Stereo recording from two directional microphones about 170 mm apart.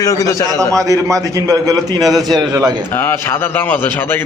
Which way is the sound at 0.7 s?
20° right (ahead or behind).